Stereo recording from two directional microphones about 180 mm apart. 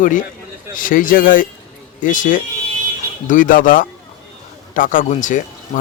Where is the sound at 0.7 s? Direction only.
50° left (ahead or behind).